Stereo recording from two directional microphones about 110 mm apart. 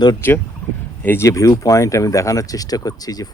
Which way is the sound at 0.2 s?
20° left (ahead or behind).